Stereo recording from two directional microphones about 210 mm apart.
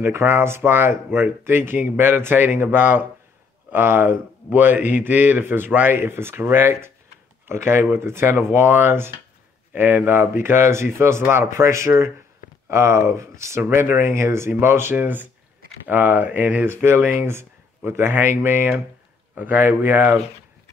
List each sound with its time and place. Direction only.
0.0 s speech: 10° right (ahead or behind)